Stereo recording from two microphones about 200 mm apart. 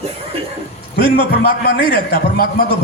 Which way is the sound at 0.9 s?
50° left (ahead or behind).